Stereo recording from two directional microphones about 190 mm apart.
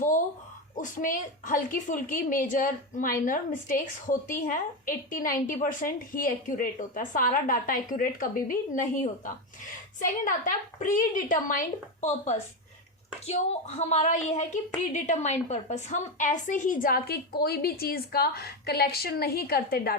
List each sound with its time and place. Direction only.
0.8 s a woman's voice: 45° left (ahead or behind)